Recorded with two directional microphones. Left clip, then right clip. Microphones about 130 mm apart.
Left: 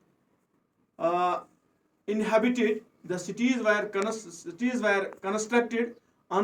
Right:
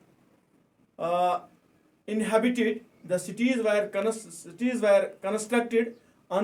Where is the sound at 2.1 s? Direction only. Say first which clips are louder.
Even; 35° right (ahead or behind).